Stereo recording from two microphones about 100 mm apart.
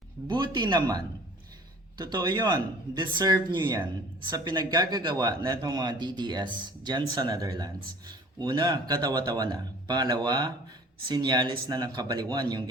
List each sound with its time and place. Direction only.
0.3 s a man's voice: 50° right (ahead or behind)
8.4 s a man's voice: 50° right (ahead or behind)